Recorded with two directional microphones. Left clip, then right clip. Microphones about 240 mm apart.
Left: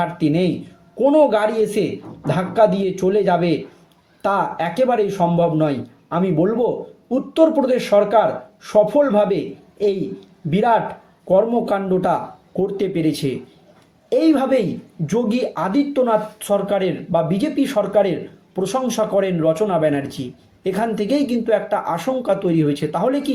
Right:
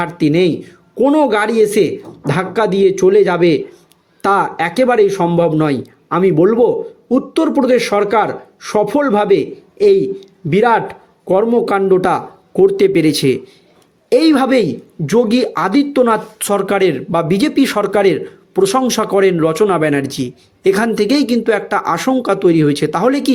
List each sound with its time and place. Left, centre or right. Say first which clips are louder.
0.0 s speech: right 5 dB; right